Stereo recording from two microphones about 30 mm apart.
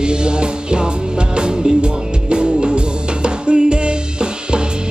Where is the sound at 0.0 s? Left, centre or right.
Right.